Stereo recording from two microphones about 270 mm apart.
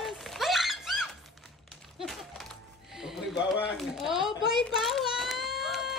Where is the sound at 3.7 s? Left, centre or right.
Centre.